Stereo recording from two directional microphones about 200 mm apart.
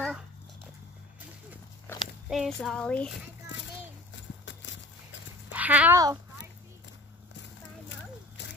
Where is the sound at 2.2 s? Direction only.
Centre (ahead or behind).